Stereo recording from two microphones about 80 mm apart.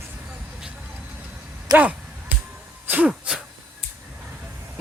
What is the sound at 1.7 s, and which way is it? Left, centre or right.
Speech, right.